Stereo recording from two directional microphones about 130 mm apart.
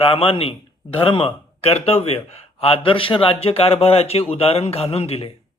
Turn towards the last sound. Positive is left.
turn(degrees=50)  # may be behind; listen again after turning